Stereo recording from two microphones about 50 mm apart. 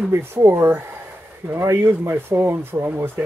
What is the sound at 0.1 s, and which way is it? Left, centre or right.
Speech, right.